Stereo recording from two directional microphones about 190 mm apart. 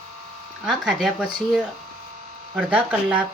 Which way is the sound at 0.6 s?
5° right (ahead or behind).